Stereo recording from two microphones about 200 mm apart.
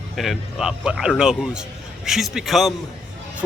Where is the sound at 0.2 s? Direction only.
Centre (ahead or behind).